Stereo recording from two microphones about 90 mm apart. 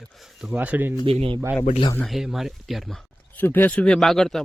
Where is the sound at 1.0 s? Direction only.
85° right.